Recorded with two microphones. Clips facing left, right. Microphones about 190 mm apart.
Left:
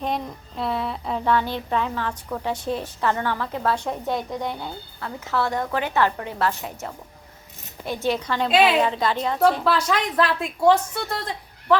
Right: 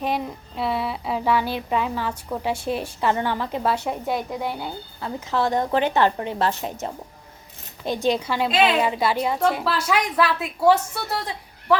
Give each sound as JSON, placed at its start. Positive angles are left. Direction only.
{"t": 0.0, "sound": "speech", "side_deg": -5}
{"t": 8.4, "sound": "a woman's voice", "side_deg": 0}
{"t": 8.8, "sound": "speech", "side_deg": -10}